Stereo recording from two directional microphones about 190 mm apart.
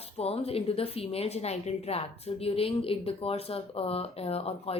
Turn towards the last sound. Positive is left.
turn(degrees=30)  # may be behind; listen again after turning